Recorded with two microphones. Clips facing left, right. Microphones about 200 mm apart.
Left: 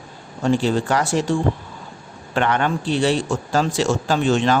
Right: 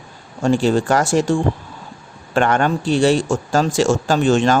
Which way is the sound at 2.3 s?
45° right (ahead or behind).